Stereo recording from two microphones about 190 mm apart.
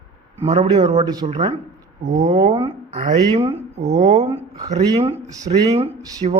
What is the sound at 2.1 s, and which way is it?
Speech, 40° right (ahead or behind).